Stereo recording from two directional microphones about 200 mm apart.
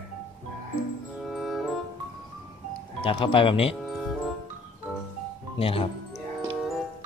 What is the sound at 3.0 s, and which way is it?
Speech, 25° left (ahead or behind).